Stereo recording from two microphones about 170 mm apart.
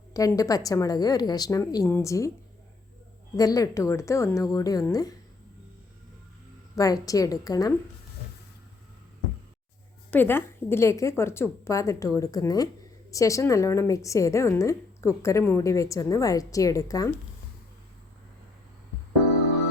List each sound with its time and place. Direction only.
0.1 s a woman's voice: 20° left (ahead or behind)
3.3 s a woman's voice: 20° left (ahead or behind)
6.7 s a woman's voice: 20° left (ahead or behind)
10.1 s a woman's voice: 10° left (ahead or behind)